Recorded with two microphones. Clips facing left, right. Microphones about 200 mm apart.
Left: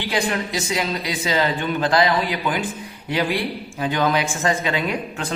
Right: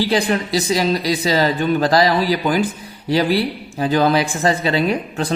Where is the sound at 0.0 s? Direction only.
35° right (ahead or behind).